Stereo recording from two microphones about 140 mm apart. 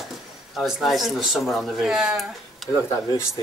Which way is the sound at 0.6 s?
Centre (ahead or behind).